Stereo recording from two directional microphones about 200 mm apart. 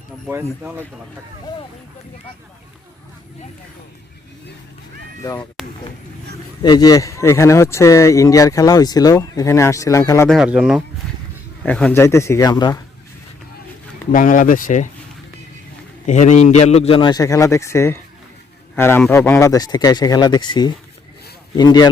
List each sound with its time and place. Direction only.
0.3 s speech: 10° right (ahead or behind)
5.6 s a sound: 5° right (ahead or behind)
6.6 s speech: 20° left (ahead or behind)
10.2 s speech: 5° right (ahead or behind)
11.6 s speech: 5° left (ahead or behind)
14.1 s speech: 40° left (ahead or behind)
16.0 s a man's voice: 35° left (ahead or behind); by 21.8 s 20° left (ahead or behind)